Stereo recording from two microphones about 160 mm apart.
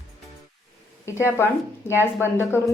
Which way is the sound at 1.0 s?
15° left (ahead or behind).